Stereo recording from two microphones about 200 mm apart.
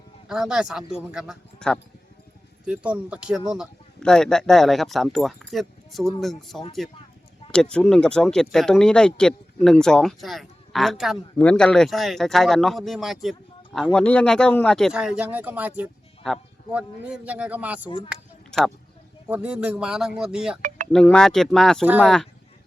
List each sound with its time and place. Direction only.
0.3 s speech: 5° right (ahead or behind)
2.6 s speech: 5° right (ahead or behind)
17.8 s speech: 25° left (ahead or behind)
18.1 s a sound: centre (ahead or behind)
19.3 s speech: 5° right (ahead or behind)
20.6 s chink: 40° right (ahead or behind)
20.9 s speech: 5° left (ahead or behind)